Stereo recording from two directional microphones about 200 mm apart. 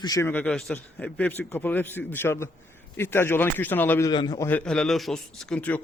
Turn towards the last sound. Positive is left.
turn(degrees=5)  # may be behind; listen again after turning